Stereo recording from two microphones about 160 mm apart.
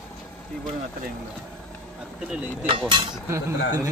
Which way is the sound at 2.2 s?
10° right (ahead or behind).